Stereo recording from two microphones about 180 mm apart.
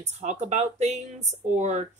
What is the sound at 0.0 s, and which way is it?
Speech, 40° right (ahead or behind).